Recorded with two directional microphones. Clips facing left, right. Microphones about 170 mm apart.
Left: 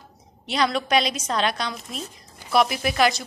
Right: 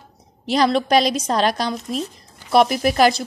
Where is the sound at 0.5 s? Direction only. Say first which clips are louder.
Right 6 dB; 35° right (ahead or behind).